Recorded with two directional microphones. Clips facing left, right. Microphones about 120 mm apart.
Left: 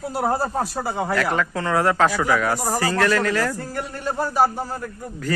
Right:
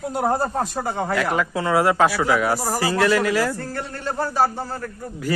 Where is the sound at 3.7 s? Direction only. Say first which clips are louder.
Left 1 dB; 10° left (ahead or behind).